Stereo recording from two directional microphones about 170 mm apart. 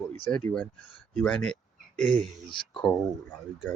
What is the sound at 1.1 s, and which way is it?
Speech, 5° left (ahead or behind).